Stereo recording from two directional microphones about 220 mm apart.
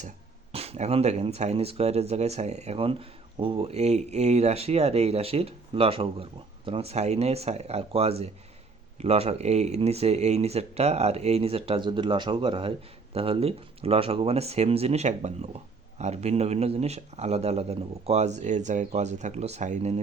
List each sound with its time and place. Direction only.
0.5 s speech: 25° right (ahead or behind)